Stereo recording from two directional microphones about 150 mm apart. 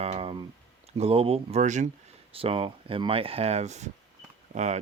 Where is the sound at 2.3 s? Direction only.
40° right (ahead or behind).